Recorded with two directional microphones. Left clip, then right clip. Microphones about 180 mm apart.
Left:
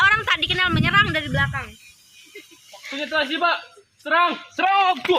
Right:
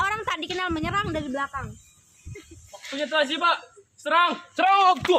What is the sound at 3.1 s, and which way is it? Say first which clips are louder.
Speech: left 1 dB; 25° right (ahead or behind).